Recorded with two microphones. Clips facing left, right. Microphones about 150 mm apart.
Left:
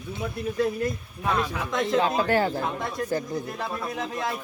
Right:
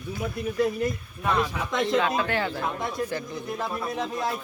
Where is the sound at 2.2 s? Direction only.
40° left (ahead or behind).